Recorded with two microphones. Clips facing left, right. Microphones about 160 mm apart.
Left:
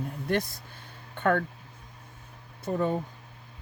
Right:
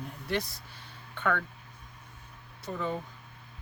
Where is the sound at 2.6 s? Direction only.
45° left (ahead or behind).